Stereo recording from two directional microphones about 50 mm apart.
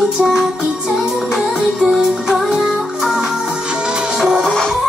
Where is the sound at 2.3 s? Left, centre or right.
Centre.